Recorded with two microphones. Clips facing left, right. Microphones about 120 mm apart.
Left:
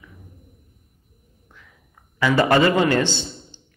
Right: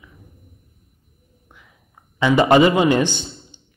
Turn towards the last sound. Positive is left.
turn(degrees=-15)  # may be behind; listen again after turning